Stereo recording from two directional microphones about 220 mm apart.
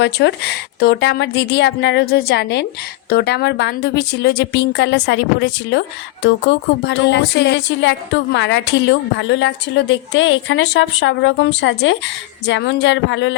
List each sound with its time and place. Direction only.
0.0 s a woman's voice: 50° left (ahead or behind)